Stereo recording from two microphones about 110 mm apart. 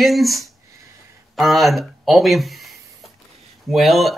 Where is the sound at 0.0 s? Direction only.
Centre (ahead or behind).